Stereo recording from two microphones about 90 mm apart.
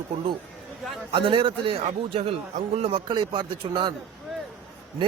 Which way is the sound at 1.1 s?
75° right (ahead or behind).